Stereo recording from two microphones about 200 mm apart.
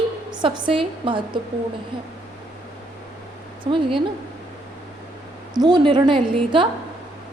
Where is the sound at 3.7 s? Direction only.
25° right (ahead or behind).